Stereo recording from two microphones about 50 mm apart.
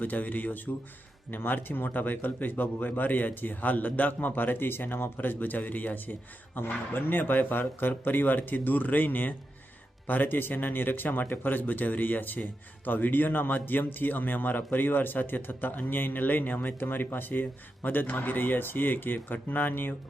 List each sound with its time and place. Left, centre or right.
0.0 s speech: left